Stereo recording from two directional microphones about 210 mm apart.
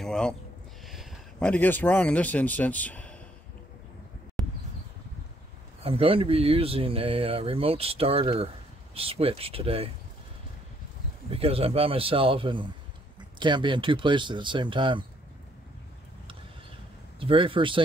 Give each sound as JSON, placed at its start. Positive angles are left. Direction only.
{"t": 0.0, "sound": "speech", "side_deg": 5}
{"t": 4.4, "sound": "a sound", "side_deg": 0}
{"t": 5.8, "sound": "speech", "side_deg": -25}
{"t": 11.2, "sound": "speech", "side_deg": -25}
{"t": 17.2, "sound": "speech", "side_deg": -25}